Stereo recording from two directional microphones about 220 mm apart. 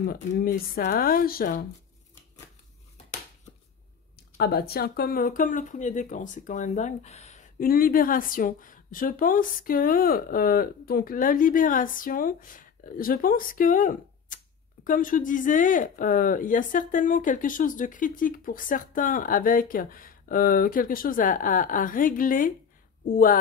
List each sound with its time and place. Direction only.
0.0 s speech: 40° left (ahead or behind)
4.4 s speech: 45° left (ahead or behind)